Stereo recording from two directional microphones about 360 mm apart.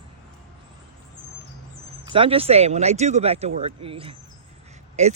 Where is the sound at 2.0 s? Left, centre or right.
Centre.